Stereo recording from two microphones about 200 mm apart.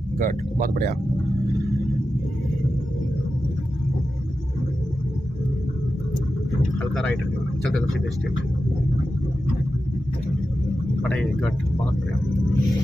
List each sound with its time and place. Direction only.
0.2 s speech: 50° right (ahead or behind)
11.1 s speech: 5° left (ahead or behind)